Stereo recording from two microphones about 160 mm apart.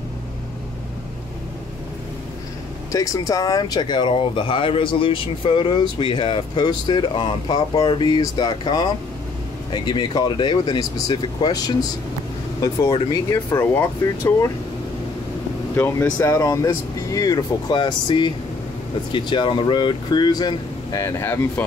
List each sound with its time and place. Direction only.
2.9 s speech: 20° left (ahead or behind)
15.7 s speech: 15° left (ahead or behind)